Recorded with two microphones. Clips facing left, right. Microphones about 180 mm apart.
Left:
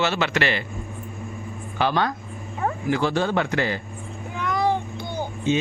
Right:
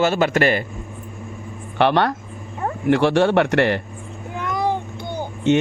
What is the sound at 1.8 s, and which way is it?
Speech, 65° right (ahead or behind).